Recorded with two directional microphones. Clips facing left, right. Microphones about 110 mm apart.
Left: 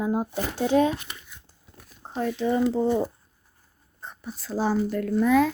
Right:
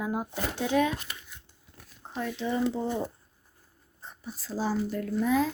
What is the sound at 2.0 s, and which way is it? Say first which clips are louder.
Speech: left 6 dB; 40° left (ahead or behind).